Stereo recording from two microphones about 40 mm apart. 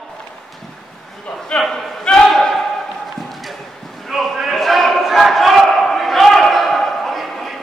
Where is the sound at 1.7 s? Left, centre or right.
Centre.